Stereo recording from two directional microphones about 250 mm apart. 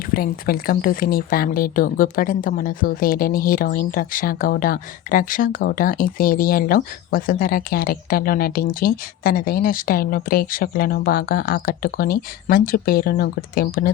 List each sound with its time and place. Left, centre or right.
0.1 s speech: left